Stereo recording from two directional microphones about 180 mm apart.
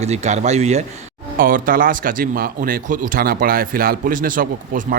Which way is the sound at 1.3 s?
50° right (ahead or behind).